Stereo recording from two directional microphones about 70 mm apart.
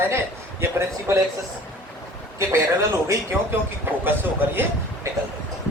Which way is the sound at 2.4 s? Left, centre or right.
Right.